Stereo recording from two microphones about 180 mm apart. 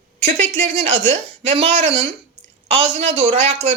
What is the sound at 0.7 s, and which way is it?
A man's voice, 30° right (ahead or behind).